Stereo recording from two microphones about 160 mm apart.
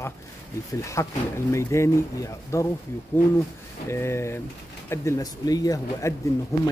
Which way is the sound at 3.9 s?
15° left (ahead or behind).